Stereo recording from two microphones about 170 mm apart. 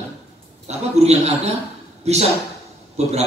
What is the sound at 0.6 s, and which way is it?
A man's voice, 40° right (ahead or behind).